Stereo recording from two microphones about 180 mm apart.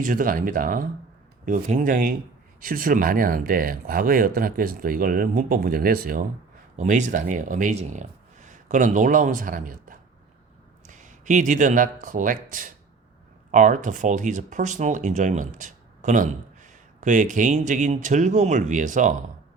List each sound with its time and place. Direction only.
0.0 s speech: 50° right (ahead or behind)
6.7 s speech: 40° right (ahead or behind)